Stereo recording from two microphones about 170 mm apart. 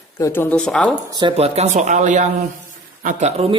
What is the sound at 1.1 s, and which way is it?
Speech, 30° right (ahead or behind).